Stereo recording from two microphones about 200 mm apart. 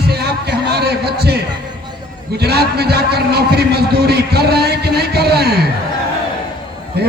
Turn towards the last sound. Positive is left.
turn(degrees=-55)  # may be behind; listen again after turning